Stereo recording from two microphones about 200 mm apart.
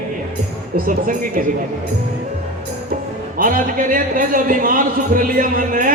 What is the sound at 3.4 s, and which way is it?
A man's voice, 45° right (ahead or behind).